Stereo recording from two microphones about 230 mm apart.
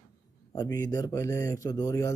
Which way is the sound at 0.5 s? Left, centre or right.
Centre.